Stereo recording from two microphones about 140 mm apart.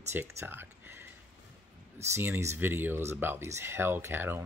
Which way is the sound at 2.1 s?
15° right (ahead or behind).